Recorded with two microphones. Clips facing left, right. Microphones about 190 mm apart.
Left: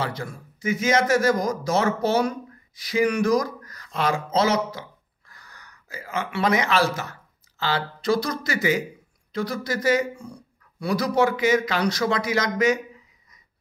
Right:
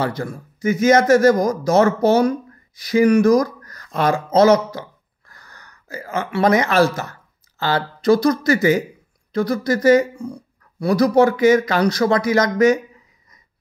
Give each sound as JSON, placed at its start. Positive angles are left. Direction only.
{"t": 0.0, "sound": "a man's voice", "side_deg": -45}